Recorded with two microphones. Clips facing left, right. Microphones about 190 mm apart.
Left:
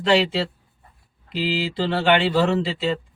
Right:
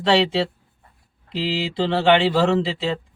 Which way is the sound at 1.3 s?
25° right (ahead or behind).